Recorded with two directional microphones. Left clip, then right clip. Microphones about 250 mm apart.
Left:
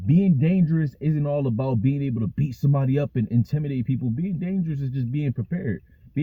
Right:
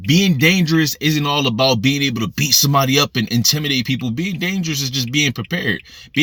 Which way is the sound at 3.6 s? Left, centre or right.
Right.